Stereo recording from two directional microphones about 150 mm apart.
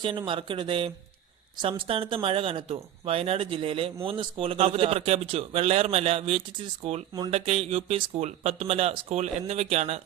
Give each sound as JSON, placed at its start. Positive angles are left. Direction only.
{"t": 0.0, "sound": "speech", "side_deg": -35}